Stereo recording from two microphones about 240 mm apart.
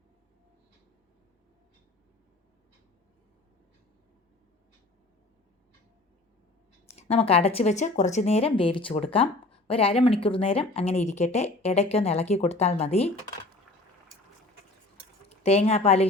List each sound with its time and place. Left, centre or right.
6.9 s speech: left
15.4 s speech: left